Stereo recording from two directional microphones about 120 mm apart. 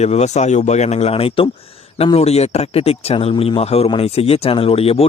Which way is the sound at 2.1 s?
60° left (ahead or behind).